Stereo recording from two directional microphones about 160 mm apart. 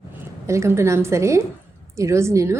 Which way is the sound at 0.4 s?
15° right (ahead or behind).